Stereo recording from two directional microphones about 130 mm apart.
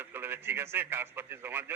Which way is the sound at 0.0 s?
15° right (ahead or behind).